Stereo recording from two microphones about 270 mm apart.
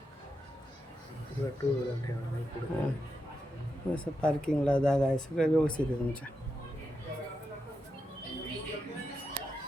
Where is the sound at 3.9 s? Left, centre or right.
Centre.